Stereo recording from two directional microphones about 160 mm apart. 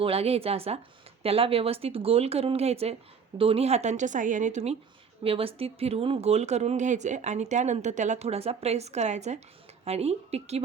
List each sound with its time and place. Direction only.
0.0 s speech: 40° right (ahead or behind)